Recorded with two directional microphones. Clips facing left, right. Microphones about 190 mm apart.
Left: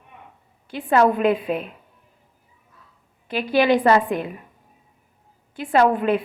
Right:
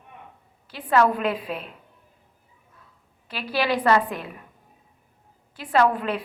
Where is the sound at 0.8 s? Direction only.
25° left (ahead or behind).